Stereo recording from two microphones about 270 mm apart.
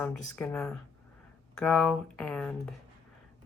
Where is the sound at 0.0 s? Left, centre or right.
Centre.